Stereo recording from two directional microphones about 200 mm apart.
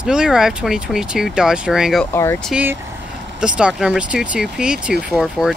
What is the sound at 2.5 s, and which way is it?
Speech, 5° right (ahead or behind).